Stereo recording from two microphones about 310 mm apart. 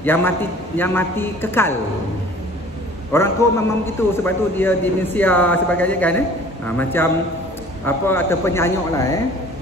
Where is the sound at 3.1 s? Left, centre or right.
Centre.